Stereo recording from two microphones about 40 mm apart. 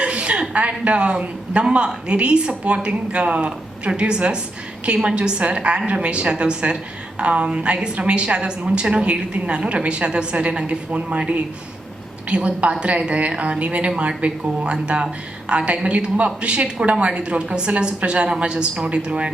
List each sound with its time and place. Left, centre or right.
0.0 s a sound: right
0.9 s a woman's voice: right
12.3 s a woman's voice: right